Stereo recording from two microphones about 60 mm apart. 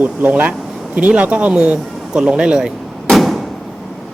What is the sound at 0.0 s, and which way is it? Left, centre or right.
Speech, right.